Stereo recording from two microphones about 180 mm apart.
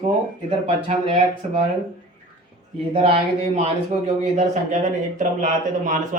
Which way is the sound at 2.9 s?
30° right (ahead or behind).